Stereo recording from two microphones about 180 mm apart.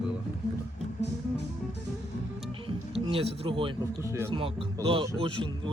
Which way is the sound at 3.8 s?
15° right (ahead or behind).